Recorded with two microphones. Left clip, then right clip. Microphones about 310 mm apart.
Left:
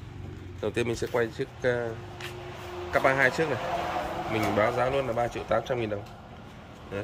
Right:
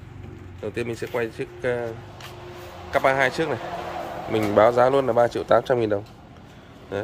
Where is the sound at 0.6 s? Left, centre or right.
Centre.